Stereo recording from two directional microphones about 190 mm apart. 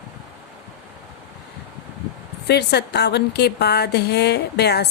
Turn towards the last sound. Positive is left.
turn(degrees=60)  # may be behind; listen again after turning